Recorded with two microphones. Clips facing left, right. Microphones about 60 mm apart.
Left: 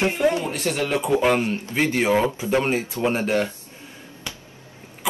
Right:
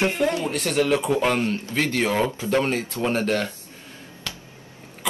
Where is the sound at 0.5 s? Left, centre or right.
Centre.